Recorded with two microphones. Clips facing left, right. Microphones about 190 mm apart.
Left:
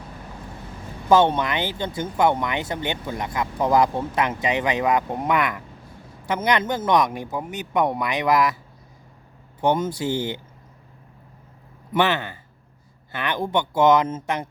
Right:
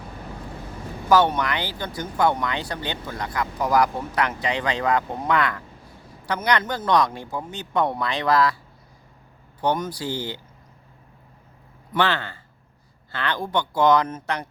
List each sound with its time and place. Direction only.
1.1 s speech: 25° left (ahead or behind)
9.6 s speech: 25° left (ahead or behind)
11.9 s speech: 20° left (ahead or behind)